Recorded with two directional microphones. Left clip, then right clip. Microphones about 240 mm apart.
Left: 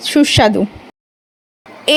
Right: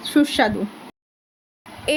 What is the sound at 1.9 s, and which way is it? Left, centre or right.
Speech, left.